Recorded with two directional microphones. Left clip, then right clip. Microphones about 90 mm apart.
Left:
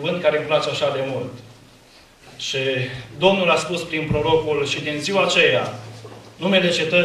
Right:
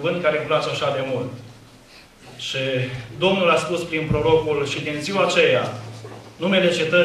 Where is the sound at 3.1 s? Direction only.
40° left (ahead or behind).